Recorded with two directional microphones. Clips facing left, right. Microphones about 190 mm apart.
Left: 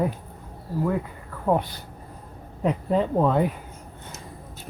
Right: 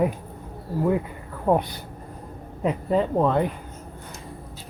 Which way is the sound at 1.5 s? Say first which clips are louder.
Right 2 dB; 10° right (ahead or behind).